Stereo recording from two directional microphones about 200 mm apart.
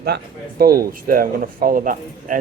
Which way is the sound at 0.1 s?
60° right (ahead or behind).